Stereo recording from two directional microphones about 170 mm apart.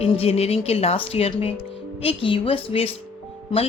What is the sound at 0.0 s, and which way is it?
Speech, 35° left (ahead or behind).